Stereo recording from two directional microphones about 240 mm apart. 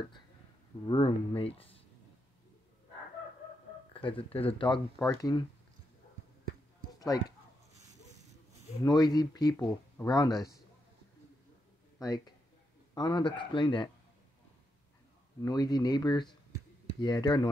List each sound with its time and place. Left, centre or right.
0.8 s a man's voice: left
3.9 s a man's voice: left
7.0 s speech: centre
8.8 s speech: centre
12.0 s a man's voice: centre
15.4 s speech: centre